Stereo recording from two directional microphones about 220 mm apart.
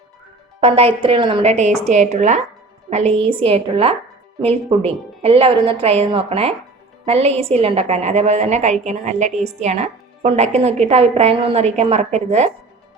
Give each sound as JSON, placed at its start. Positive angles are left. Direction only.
{"t": 1.0, "sound": "a woman's voice", "side_deg": -25}